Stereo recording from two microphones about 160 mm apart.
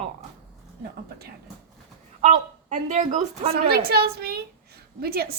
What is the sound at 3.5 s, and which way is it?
Speech, 75° right (ahead or behind).